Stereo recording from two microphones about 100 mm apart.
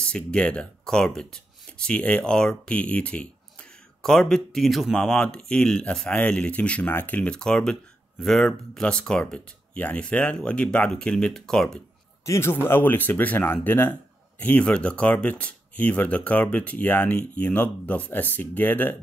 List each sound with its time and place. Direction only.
0.0 s speech: 10° left (ahead or behind)
12.3 s speech: 25° left (ahead or behind)